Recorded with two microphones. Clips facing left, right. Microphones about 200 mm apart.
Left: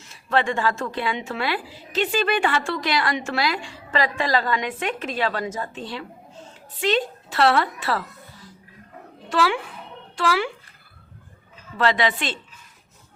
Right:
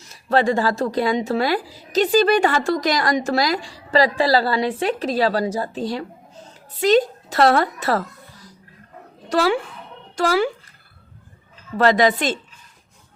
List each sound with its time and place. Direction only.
0.0 s speech: 40° right (ahead or behind)
9.3 s speech: 40° right (ahead or behind)
11.8 s a woman's voice: 40° right (ahead or behind)